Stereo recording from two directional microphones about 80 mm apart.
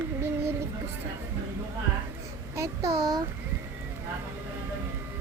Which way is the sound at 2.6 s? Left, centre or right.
Right.